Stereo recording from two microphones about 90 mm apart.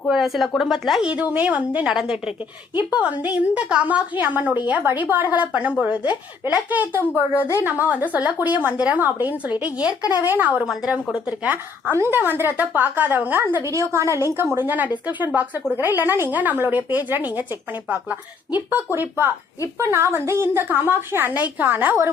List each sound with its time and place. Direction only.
0.1 s a woman's voice: 5° right (ahead or behind)
11.9 s a woman's voice: 25° right (ahead or behind)
13.7 s a woman's voice: 35° right (ahead or behind)
14.5 s a woman's voice: 20° right (ahead or behind)